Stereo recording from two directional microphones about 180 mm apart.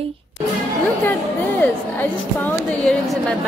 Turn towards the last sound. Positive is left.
turn(degrees=0)  # may be behind; listen again after turning